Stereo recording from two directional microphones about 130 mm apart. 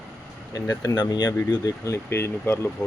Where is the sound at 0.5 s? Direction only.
30° left (ahead or behind).